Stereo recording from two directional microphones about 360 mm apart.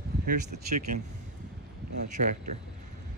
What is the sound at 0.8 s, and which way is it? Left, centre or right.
Speech, right.